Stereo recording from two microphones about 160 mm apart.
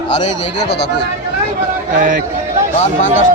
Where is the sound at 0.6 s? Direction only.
90° left.